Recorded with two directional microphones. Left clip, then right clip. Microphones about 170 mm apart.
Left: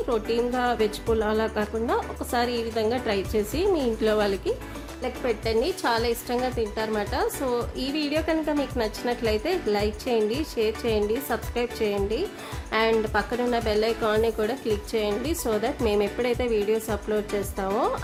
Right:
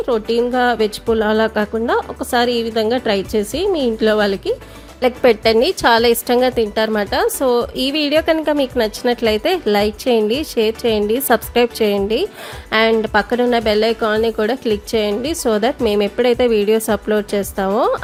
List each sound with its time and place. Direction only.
0.1 s a woman's voice: 35° right (ahead or behind)
4.9 s a woman's voice: 55° right (ahead or behind)